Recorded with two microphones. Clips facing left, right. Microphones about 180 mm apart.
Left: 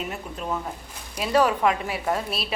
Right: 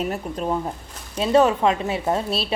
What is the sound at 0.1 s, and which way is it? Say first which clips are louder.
A woman's voice: right 6 dB; 35° right (ahead or behind).